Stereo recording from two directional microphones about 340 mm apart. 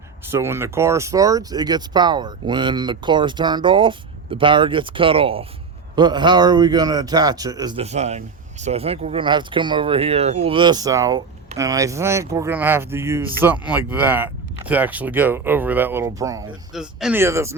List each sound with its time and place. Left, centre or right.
0.3 s speech: centre